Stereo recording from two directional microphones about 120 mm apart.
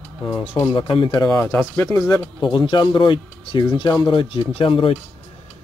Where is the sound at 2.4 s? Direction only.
40° left (ahead or behind).